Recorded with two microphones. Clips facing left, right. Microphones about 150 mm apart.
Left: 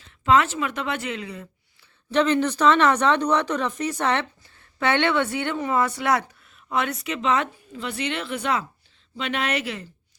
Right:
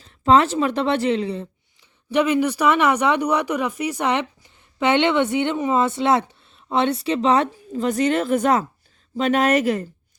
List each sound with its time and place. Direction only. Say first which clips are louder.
0.0 s speech: right 4 dB; 35° right (ahead or behind)
2.0 s speech: right 2 dB; 10° right (ahead or behind); by 9.9 s 45° right (ahead or behind)